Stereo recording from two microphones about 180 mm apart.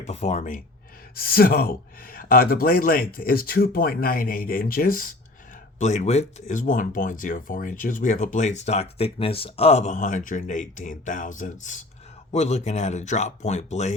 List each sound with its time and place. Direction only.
0.0 s speech: 40° left (ahead or behind)
1.1 s speech: 55° left (ahead or behind)
5.8 s speech: 40° left (ahead or behind)